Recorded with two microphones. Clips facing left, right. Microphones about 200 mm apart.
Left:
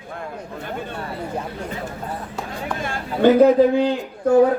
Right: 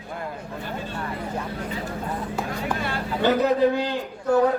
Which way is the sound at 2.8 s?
50° left (ahead or behind).